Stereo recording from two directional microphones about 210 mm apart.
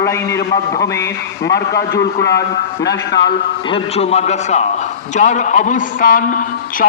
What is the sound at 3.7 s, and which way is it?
A man's voice, 30° left (ahead or behind).